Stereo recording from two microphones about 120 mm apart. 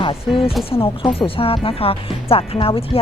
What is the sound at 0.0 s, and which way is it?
Speech, 50° left (ahead or behind).